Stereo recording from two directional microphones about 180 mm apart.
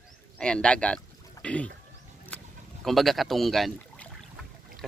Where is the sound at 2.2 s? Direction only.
5° left (ahead or behind).